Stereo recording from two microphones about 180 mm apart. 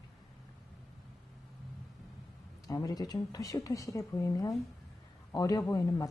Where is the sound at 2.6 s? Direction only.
20° left (ahead or behind).